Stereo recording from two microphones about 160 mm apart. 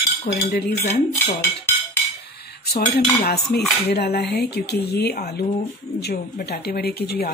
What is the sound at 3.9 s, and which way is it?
Speech, 85° left.